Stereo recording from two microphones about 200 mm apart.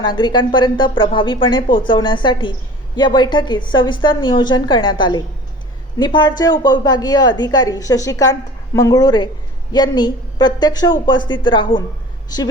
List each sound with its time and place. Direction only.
0.0 s a woman's voice: 25° left (ahead or behind)